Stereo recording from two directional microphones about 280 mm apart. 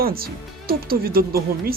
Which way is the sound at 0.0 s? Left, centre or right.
Right.